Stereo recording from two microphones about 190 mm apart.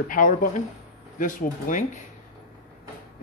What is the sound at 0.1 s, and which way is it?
Speech, 45° left (ahead or behind).